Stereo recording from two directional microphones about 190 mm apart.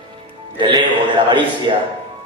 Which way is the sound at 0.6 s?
25° right (ahead or behind).